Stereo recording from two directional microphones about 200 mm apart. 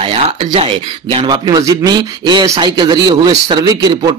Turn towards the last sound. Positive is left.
turn(degrees=-20)  # may be behind; listen again after turning